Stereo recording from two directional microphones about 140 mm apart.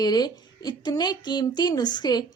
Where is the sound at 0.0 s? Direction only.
30° left (ahead or behind).